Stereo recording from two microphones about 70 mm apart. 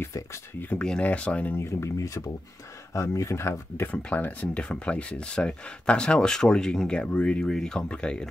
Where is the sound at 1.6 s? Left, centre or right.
Left.